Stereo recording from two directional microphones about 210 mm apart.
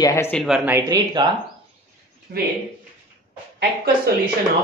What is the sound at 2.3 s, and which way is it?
Speech, 45° right (ahead or behind).